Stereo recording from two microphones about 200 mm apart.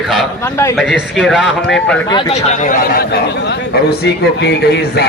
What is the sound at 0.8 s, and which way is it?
A man's voice, centre (ahead or behind).